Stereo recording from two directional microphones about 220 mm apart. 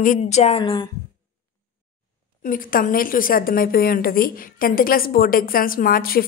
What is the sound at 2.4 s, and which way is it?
A woman's voice, 40° left (ahead or behind).